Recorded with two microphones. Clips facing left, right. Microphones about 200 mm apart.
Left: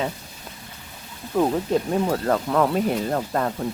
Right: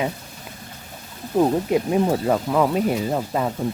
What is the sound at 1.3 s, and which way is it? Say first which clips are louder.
Speech: right 2 dB; 15° right (ahead or behind).